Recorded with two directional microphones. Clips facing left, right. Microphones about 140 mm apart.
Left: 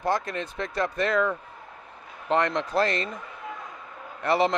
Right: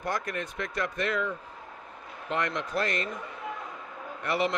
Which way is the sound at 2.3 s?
35° left (ahead or behind).